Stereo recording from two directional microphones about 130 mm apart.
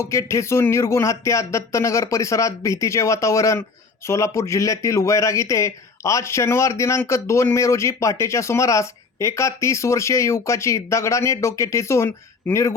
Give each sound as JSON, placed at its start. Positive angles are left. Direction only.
{"t": 0.0, "sound": "speech", "side_deg": 25}